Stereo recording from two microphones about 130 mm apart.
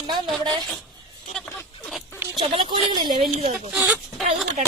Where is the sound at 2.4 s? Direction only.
40° right (ahead or behind).